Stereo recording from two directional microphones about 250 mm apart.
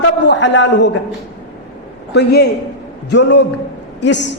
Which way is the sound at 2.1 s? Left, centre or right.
Left.